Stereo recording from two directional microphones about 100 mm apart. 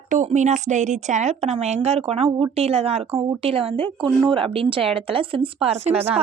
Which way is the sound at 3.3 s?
80° right.